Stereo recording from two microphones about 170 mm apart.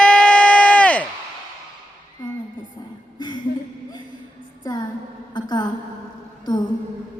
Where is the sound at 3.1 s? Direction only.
25° left (ahead or behind).